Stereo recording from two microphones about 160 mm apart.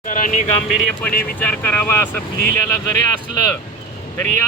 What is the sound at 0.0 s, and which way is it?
Vehicle, 55° left (ahead or behind).